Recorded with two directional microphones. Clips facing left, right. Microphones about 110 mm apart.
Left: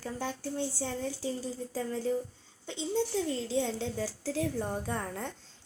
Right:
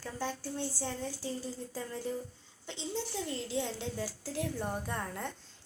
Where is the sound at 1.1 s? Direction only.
25° left (ahead or behind).